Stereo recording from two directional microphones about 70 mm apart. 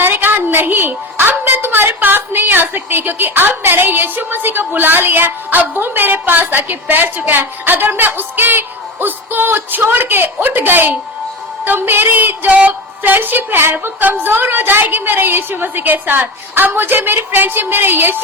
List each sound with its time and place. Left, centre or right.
0.0 s a woman's voice: right